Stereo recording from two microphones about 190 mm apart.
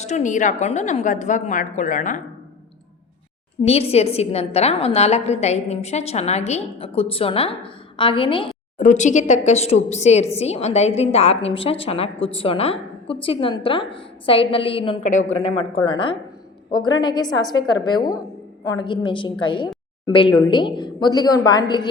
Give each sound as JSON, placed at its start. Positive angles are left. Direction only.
{"t": 0.0, "sound": "a woman's voice", "side_deg": 40}
{"t": 3.6, "sound": "a woman's voice", "side_deg": 30}
{"t": 8.8, "sound": "a woman's voice", "side_deg": 40}